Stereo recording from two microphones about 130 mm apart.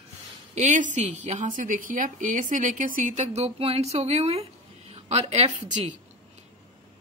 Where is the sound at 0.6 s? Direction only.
70° right (ahead or behind); by 5.9 s 55° right (ahead or behind).